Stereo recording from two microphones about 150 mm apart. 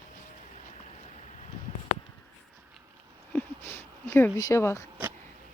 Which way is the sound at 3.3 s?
10° left (ahead or behind).